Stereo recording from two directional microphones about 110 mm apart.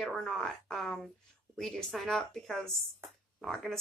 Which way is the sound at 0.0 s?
5° left (ahead or behind).